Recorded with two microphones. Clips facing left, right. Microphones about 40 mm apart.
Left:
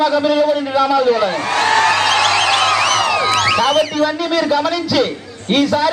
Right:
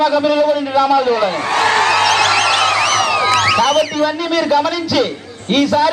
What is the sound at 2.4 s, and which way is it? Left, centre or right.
Emergency vehicle, left.